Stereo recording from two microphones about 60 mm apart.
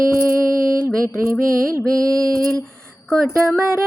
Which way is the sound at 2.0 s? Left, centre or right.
Right.